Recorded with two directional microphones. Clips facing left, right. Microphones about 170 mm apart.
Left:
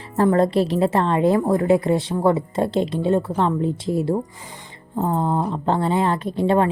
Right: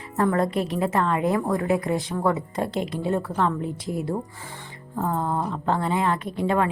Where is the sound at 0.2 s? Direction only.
25° left (ahead or behind).